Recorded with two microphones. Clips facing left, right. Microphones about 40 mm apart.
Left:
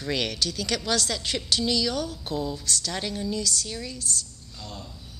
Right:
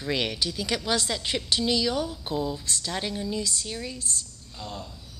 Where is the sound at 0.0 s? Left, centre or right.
Centre.